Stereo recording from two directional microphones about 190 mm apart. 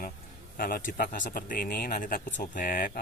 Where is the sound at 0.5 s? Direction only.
50° left (ahead or behind).